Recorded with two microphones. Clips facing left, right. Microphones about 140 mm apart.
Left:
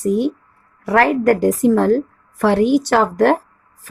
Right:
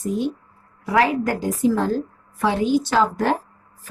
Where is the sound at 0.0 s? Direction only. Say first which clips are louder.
Left 6 dB; 65° left (ahead or behind).